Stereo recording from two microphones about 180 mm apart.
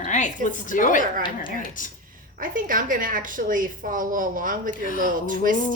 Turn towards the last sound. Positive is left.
turn(degrees=-50)  # may be behind; listen again after turning